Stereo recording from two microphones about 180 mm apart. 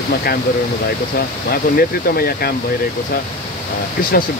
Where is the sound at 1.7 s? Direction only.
55° left (ahead or behind).